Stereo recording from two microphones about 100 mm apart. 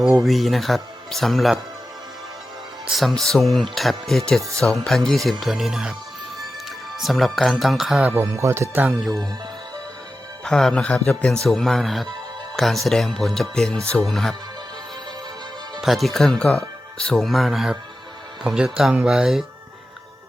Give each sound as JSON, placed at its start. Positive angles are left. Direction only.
{"t": 0.2, "sound": "speech", "side_deg": 0}
{"t": 2.9, "sound": "speech", "side_deg": 0}
{"t": 6.9, "sound": "speech", "side_deg": 0}
{"t": 8.0, "sound": "speech", "side_deg": -20}
{"t": 10.4, "sound": "speech", "side_deg": 5}
{"t": 15.8, "sound": "speech", "side_deg": 0}